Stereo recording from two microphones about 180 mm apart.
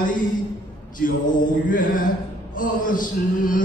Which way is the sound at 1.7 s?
50° left (ahead or behind).